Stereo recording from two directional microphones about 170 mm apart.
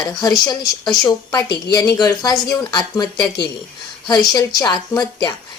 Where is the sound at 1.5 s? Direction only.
75° left (ahead or behind).